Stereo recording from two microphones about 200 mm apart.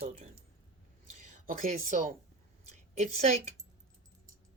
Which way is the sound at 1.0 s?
40° right (ahead or behind).